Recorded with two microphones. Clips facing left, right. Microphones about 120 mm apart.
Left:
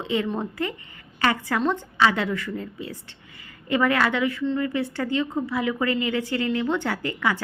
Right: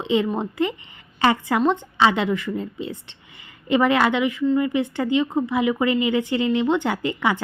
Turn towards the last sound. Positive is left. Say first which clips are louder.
# right 3 dB
turn(degrees=-20)  # may be behind; listen again after turning